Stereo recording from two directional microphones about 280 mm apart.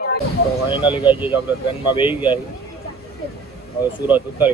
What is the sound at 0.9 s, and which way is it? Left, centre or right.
Speech, centre.